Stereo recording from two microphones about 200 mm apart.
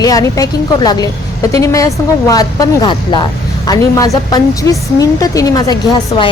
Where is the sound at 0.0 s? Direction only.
15° left (ahead or behind).